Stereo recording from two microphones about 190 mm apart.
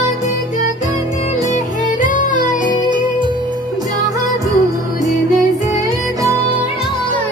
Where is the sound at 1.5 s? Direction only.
45° left (ahead or behind).